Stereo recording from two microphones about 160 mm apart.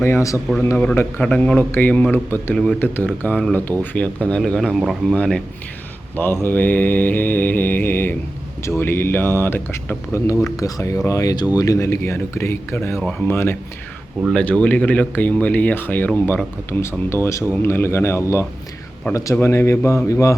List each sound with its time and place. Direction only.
0.0 s speech: 15° left (ahead or behind)
6.4 s speech: 10° left (ahead or behind)